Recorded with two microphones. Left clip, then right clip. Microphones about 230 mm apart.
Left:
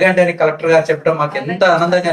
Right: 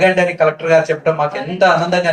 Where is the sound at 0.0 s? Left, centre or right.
Left.